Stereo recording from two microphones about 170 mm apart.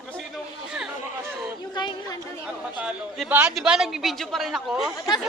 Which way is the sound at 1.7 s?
25° left (ahead or behind).